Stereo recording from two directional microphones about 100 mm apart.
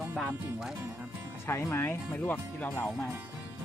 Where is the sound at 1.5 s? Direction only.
25° left (ahead or behind).